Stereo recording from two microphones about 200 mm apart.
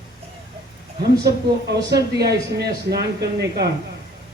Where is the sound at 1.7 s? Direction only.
55° right (ahead or behind).